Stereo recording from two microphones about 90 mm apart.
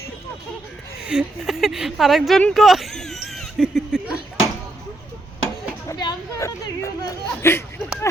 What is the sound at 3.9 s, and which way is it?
Speech, 5° right (ahead or behind).